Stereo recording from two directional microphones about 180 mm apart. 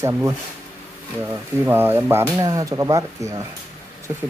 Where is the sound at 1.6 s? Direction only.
10° right (ahead or behind).